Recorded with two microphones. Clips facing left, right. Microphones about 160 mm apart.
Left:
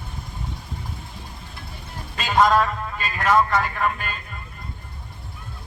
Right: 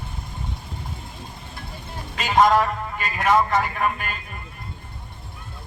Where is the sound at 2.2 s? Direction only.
15° right (ahead or behind).